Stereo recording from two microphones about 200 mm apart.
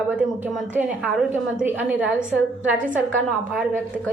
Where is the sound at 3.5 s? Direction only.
5° right (ahead or behind).